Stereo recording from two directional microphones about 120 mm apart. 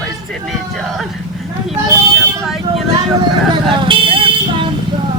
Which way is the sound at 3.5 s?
45° right (ahead or behind).